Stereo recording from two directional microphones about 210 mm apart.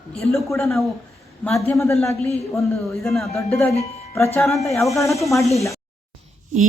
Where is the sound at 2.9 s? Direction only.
Centre (ahead or behind).